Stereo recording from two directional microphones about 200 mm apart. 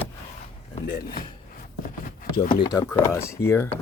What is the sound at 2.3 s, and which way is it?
Speech, 25° left (ahead or behind).